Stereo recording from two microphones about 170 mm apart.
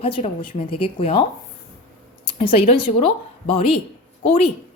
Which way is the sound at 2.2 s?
30° left (ahead or behind).